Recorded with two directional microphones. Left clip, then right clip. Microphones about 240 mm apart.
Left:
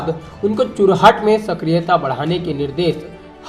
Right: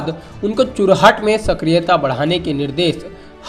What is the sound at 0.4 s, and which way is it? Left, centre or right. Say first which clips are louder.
Speech: right 1 dB; right.